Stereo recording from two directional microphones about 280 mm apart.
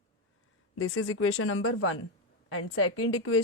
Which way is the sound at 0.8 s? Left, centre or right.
Left.